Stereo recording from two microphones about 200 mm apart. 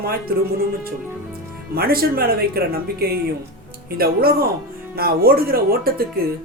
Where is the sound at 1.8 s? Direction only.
50° right (ahead or behind).